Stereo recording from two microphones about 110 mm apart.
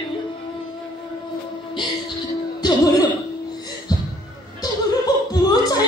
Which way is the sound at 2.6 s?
40° left (ahead or behind).